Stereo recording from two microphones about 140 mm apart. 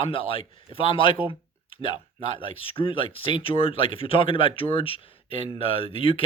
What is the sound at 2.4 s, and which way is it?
Speech, 40° left (ahead or behind).